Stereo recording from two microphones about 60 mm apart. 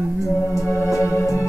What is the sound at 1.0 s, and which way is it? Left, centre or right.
Organ, left.